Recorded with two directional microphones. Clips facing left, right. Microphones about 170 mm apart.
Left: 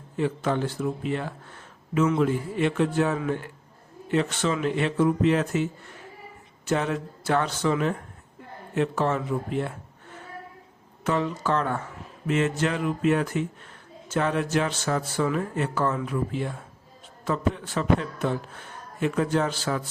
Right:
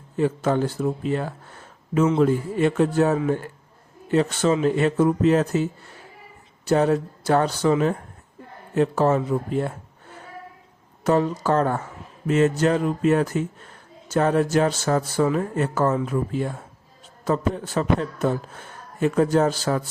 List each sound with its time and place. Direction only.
0.2 s a man's voice: 40° right (ahead or behind)
6.7 s a man's voice: 40° right (ahead or behind)
11.0 s a man's voice: 40° right (ahead or behind)